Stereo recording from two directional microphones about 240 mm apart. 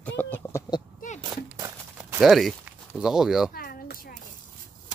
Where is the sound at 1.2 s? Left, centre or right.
Centre.